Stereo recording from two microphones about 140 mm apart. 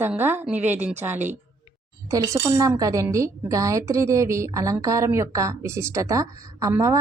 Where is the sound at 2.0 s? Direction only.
25° right (ahead or behind).